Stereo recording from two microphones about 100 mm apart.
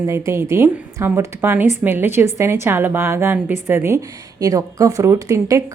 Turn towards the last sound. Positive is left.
turn(degrees=-30)  # may be behind; listen again after turning